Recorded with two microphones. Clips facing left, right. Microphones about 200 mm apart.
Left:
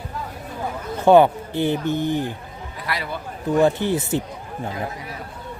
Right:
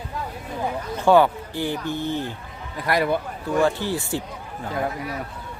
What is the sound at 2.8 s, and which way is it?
Speech, 50° right (ahead or behind).